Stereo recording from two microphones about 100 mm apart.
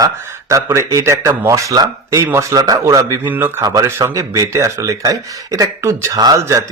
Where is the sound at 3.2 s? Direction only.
20° right (ahead or behind).